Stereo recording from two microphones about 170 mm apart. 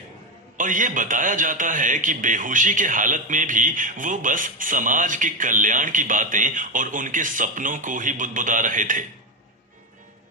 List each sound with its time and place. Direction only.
0.5 s a man's voice: 50° right (ahead or behind)